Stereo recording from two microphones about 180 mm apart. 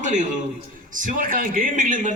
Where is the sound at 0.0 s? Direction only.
45° right (ahead or behind).